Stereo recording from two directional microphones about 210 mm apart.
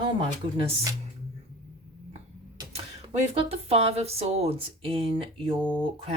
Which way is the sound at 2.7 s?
30° right (ahead or behind).